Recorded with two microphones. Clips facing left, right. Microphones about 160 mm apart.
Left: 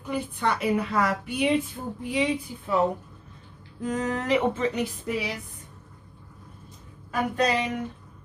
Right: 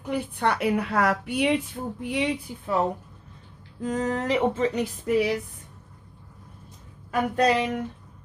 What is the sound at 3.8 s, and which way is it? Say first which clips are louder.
Speech: right 1 dB; 30° right (ahead or behind).